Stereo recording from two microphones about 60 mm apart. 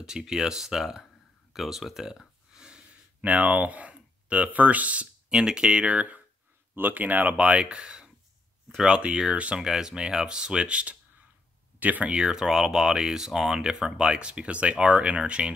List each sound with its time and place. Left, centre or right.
0.0 s speech: centre
1.5 s a sound: centre; by 5.0 s right
5.3 s speech: centre